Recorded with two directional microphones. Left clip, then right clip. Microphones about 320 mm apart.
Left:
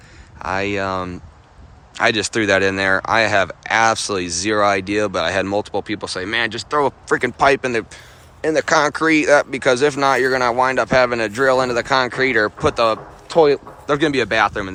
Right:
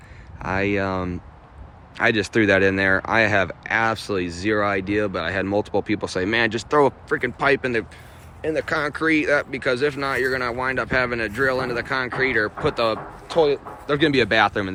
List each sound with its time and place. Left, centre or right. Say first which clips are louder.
0.3 s speech: left 2 dB; centre
7.1 s speech: left 5 dB; centre
13.3 s speech: left 5 dB; left
13.9 s speech: left 1 dB; centre